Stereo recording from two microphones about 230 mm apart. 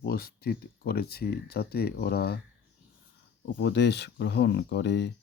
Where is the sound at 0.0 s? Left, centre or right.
Left.